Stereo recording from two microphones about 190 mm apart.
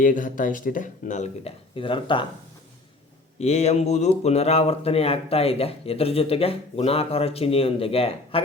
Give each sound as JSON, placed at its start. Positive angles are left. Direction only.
{"t": 0.0, "sound": "speech", "side_deg": 45}
{"t": 3.3, "sound": "speech", "side_deg": 35}